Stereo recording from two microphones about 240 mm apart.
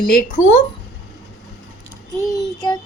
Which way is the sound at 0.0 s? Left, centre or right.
Left.